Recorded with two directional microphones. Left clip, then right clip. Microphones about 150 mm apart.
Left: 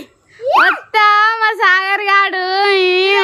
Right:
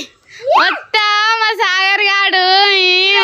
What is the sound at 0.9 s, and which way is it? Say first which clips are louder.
Child singing: left 2 dB; centre (ahead or behind).